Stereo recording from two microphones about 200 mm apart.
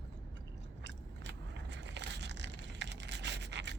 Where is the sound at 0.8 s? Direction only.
65° right (ahead or behind).